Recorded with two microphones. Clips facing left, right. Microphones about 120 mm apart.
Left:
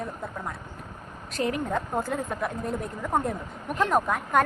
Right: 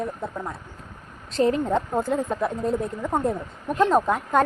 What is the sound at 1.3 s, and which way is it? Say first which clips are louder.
A woman's voice: right 6 dB; 30° right (ahead or behind).